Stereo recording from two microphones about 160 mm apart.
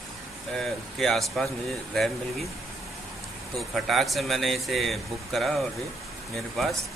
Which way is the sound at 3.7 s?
Centre (ahead or behind).